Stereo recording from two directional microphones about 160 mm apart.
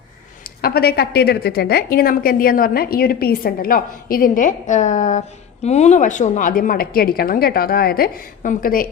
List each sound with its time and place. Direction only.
0.6 s a woman's voice: 80° left; by 8.9 s 60° left (ahead or behind)